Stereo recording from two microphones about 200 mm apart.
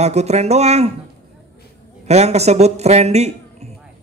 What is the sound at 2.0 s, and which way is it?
A man's voice, 35° right (ahead or behind).